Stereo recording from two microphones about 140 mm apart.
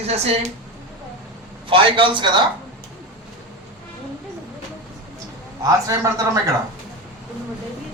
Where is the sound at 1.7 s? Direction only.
35° right (ahead or behind).